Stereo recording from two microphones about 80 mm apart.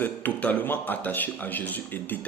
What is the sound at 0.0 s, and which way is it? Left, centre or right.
A man's voice, left.